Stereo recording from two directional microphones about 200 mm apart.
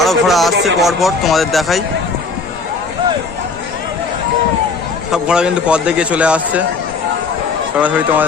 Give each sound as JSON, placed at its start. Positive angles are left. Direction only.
{"t": 0.0, "sound": "a man's voice", "side_deg": 0}
{"t": 5.1, "sound": "a man's voice", "side_deg": -5}
{"t": 7.8, "sound": "a man's voice", "side_deg": -5}